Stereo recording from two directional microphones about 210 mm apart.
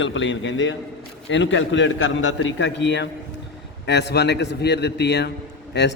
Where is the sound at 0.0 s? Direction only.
60° left (ahead or behind).